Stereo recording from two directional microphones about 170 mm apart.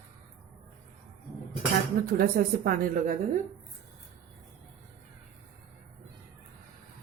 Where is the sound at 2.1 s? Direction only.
60° right (ahead or behind).